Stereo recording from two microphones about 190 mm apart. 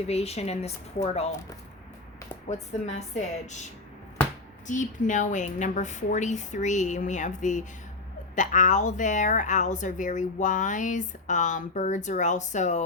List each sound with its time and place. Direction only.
0.1 s speech: 35° left (ahead or behind)
2.5 s speech: 35° left (ahead or behind)